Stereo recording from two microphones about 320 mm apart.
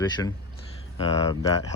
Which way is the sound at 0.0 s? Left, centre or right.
Centre.